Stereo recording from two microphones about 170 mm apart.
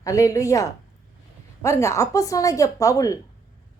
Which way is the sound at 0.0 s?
20° left (ahead or behind).